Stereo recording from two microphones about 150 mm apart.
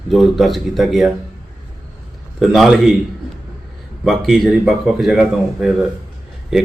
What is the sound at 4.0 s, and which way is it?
A man's voice, centre (ahead or behind).